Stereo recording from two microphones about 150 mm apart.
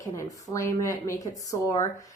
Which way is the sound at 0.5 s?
20° left (ahead or behind).